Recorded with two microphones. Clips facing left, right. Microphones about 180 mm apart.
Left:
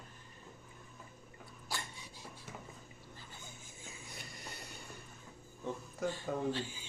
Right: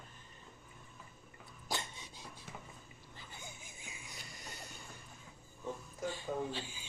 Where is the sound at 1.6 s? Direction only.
20° right (ahead or behind).